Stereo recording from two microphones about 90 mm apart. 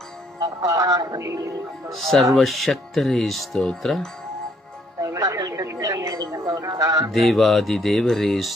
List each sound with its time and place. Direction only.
0.4 s speech: 40° right (ahead or behind)
1.9 s speech: centre (ahead or behind)
5.0 s a sound: 35° right (ahead or behind)
7.1 s speech: centre (ahead or behind)